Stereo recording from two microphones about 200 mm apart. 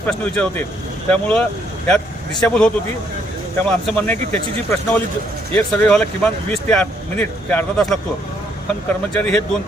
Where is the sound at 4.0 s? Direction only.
10° left (ahead or behind).